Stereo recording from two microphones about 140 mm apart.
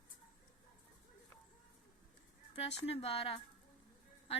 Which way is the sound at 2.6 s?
45° left (ahead or behind).